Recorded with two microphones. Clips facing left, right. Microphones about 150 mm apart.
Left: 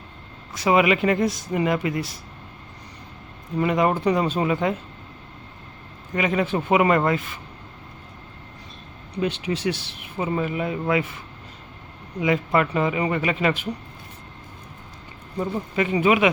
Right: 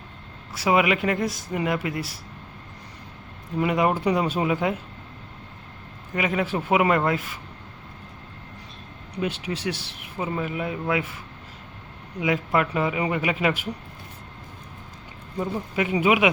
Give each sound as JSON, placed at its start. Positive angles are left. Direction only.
{"t": 0.5, "sound": "speech", "side_deg": -5}
{"t": 3.6, "sound": "speech", "side_deg": -5}
{"t": 6.1, "sound": "speech", "side_deg": -5}
{"t": 9.2, "sound": "speech", "side_deg": -5}
{"t": 12.2, "sound": "speech", "side_deg": 0}
{"t": 15.4, "sound": "speech", "side_deg": -5}